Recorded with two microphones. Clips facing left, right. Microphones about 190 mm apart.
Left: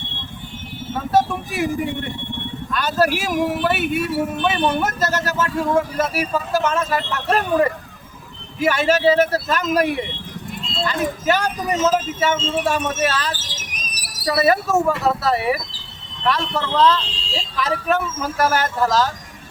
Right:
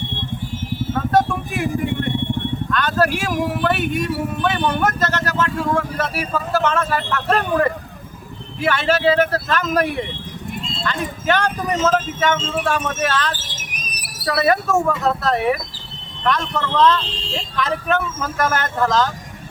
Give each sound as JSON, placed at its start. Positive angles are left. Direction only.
{"t": 0.9, "sound": "music", "side_deg": 5}
{"t": 2.7, "sound": "speech", "side_deg": 10}
{"t": 10.8, "sound": "speech", "side_deg": 5}
{"t": 13.7, "sound": "squawk", "side_deg": -55}
{"t": 14.3, "sound": "speech", "side_deg": 5}